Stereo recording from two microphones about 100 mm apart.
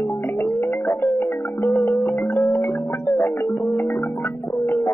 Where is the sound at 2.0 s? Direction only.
20° left (ahead or behind).